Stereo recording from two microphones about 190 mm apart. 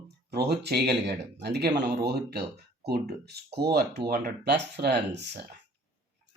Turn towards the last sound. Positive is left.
turn(degrees=-60)  # may be behind; listen again after turning